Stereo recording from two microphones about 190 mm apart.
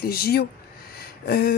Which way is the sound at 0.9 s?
55° left (ahead or behind).